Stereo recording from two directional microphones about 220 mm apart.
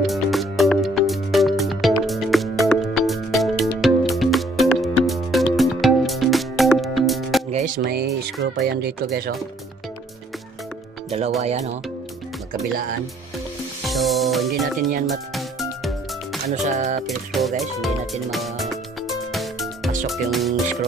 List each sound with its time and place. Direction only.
0.0 s music: centre (ahead or behind)
7.5 s music: 35° right (ahead or behind)
8.4 s speech: 50° right (ahead or behind)
11.1 s speech: 30° right (ahead or behind)
13.8 s music: centre (ahead or behind)
16.6 s music: 35° right (ahead or behind)
17.3 s music: centre (ahead or behind)
20.1 s speech: centre (ahead or behind)